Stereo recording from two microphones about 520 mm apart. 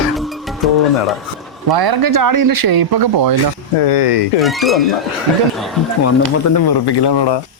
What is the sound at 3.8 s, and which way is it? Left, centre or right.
Speech, left.